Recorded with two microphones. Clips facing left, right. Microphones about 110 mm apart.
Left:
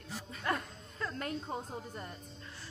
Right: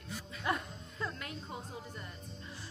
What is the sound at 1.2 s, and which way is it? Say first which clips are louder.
Speech: left 6 dB; 40° left (ahead or behind).